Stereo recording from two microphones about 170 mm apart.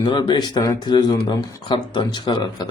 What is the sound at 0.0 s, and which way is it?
A man's voice, 25° left (ahead or behind).